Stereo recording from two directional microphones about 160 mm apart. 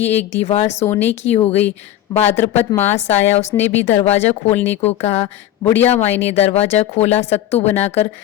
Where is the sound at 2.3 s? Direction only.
15° left (ahead or behind).